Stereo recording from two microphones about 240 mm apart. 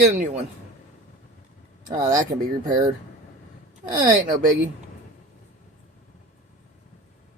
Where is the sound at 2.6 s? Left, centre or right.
Right.